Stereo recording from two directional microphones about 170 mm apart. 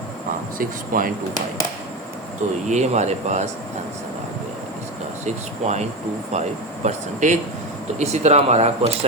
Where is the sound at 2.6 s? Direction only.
45° right (ahead or behind).